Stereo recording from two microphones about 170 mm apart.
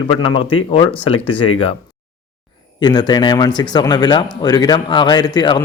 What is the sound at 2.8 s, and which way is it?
Speech, 25° left (ahead or behind).